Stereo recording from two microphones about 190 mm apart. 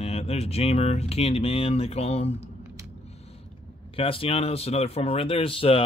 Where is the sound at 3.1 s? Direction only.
30° left (ahead or behind).